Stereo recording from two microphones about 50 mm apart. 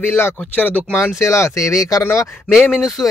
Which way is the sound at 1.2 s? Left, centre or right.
Left.